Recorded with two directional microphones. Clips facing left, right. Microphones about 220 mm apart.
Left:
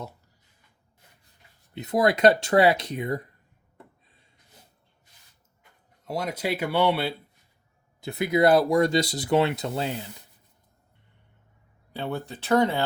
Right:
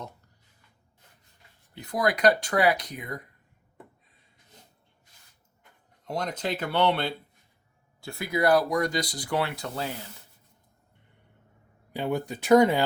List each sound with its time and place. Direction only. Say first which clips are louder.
1.7 s speech: left 5 dB; 25° left (ahead or behind)
6.1 s speech: left 2 dB; 5° left (ahead or behind)
8.0 s speech: left 4 dB; 20° left (ahead or behind)
11.9 s speech: right 3 dB; 15° right (ahead or behind)